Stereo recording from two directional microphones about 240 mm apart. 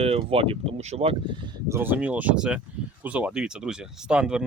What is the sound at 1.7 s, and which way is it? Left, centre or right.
Speech, centre.